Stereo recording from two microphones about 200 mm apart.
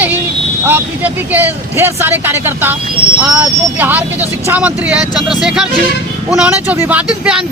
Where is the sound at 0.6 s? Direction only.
10° right (ahead or behind).